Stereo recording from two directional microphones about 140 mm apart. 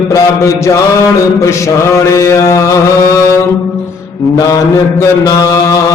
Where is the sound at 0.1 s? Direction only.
20° left (ahead or behind).